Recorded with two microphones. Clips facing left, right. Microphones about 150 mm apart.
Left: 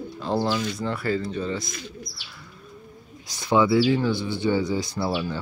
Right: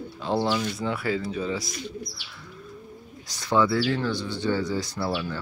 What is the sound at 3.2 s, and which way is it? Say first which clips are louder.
Speech: left 2 dB; 10° left (ahead or behind).